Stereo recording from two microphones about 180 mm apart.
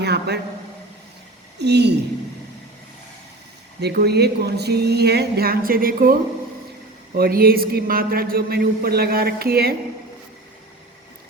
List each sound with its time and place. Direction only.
0.0 s a woman's voice: 65° right (ahead or behind)
1.5 s a woman's voice: 70° right (ahead or behind)
3.8 s a woman's voice: 65° right (ahead or behind)